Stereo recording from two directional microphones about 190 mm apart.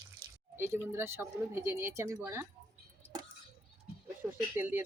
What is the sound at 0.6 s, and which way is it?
Speech, 10° right (ahead or behind).